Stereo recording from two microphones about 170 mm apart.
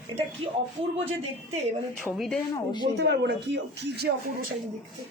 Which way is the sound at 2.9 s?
80° right.